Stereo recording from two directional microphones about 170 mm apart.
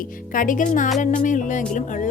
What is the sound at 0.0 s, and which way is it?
A woman's voice, 50° left (ahead or behind).